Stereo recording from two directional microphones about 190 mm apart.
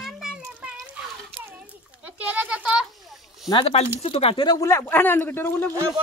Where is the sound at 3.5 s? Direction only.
30° left (ahead or behind); by 5.7 s 10° left (ahead or behind).